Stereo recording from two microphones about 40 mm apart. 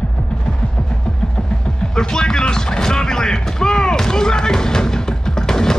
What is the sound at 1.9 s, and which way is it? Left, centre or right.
Music, centre.